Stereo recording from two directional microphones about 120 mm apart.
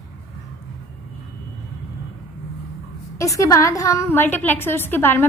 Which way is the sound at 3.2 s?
25° left (ahead or behind).